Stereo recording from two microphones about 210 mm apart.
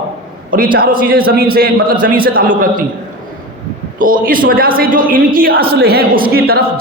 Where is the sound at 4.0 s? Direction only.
40° right (ahead or behind).